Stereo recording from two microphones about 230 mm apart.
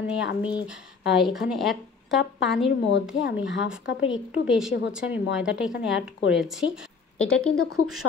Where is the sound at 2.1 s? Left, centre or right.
Left.